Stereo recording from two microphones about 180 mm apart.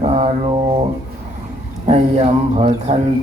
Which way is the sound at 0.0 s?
35° right (ahead or behind).